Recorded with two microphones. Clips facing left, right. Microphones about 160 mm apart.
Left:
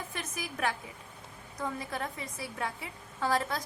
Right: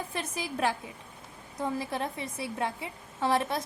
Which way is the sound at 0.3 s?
30° right (ahead or behind).